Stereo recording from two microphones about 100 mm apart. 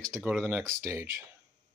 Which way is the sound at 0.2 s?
10° right (ahead or behind).